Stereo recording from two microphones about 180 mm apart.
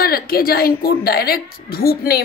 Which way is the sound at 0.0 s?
55° left (ahead or behind).